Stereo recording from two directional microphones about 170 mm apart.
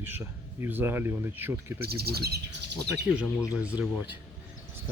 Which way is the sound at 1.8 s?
65° right (ahead or behind).